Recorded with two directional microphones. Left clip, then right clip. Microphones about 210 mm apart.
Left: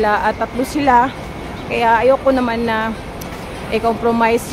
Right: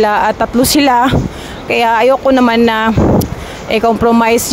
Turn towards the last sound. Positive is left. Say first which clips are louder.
# right 5 dB
turn(degrees=-45)  # may be behind; listen again after turning